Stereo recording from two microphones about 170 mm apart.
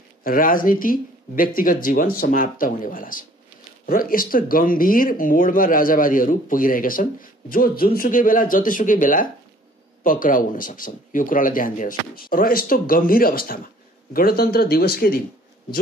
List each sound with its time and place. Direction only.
0.2 s speech: 55° left (ahead or behind)